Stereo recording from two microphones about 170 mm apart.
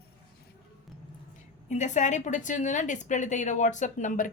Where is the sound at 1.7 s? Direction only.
45° left (ahead or behind).